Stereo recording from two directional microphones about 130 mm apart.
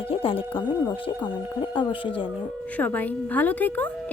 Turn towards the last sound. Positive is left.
turn(degrees=15)  # may be behind; listen again after turning